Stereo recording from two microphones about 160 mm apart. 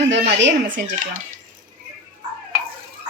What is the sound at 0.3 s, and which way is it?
Speech, 90° right.